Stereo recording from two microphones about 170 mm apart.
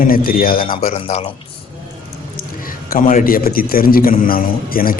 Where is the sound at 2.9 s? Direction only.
55° left (ahead or behind).